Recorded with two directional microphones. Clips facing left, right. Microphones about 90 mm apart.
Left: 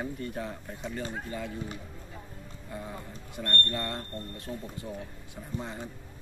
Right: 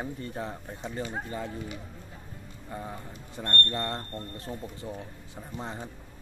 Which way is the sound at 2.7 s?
30° right (ahead or behind).